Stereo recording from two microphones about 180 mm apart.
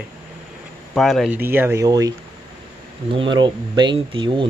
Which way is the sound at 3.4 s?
25° right (ahead or behind).